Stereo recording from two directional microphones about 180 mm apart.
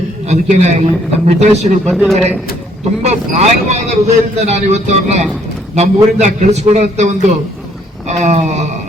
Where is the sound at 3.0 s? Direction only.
35° right (ahead or behind).